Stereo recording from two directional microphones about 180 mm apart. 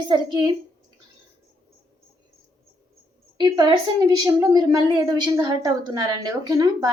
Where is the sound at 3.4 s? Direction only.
25° right (ahead or behind).